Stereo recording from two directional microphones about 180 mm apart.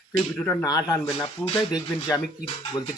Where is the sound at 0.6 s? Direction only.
20° left (ahead or behind).